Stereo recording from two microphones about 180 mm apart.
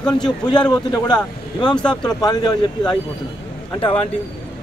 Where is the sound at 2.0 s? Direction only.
20° left (ahead or behind).